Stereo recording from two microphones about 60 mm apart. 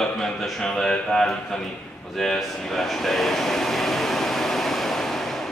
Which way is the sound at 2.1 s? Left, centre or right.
Centre.